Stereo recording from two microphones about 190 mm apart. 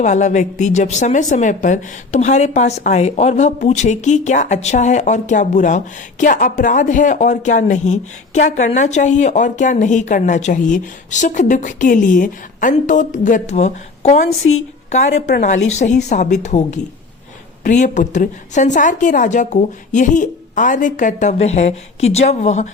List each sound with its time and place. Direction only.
0.0 s a woman's voice: 40° left (ahead or behind)
15.3 s a woman's voice: 40° left (ahead or behind)